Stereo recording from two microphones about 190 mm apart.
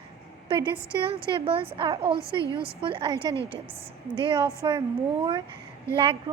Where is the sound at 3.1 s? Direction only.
15° left (ahead or behind).